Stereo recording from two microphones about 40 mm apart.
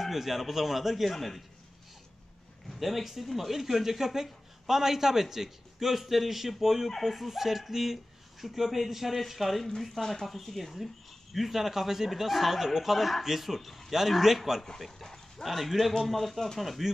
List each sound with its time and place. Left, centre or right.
0.0 s speech: centre
2.7 s speech: centre
14.8 s dog: centre
15.4 s speech: centre